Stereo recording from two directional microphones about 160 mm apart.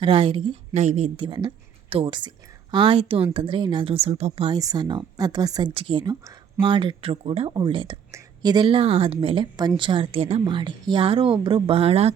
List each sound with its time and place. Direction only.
0.0 s a woman's voice: 35° right (ahead or behind)
4.5 s a woman's voice: 25° right (ahead or behind); by 12.1 s 40° right (ahead or behind)